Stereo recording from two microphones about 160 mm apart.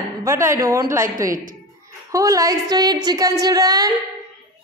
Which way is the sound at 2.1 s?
20° right (ahead or behind).